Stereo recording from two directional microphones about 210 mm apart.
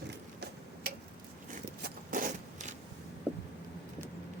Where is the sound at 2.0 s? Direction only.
40° right (ahead or behind).